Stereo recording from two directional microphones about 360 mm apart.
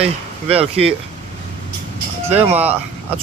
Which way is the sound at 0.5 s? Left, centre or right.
Centre.